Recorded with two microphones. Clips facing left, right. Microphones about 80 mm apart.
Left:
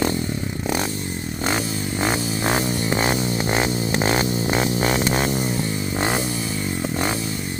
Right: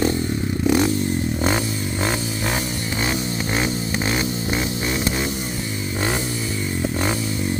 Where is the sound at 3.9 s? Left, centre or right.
Left.